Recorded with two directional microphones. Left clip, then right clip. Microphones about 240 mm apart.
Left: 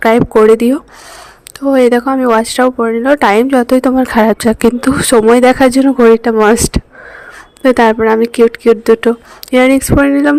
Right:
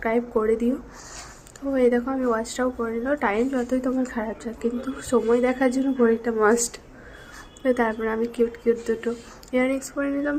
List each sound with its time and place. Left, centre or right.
0.0 s speech: left
1.7 s a woman's voice: left